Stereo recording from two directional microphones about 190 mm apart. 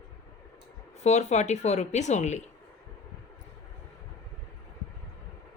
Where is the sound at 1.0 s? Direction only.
35° left (ahead or behind).